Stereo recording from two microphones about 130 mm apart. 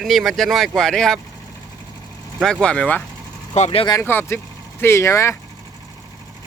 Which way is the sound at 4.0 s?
15° left (ahead or behind).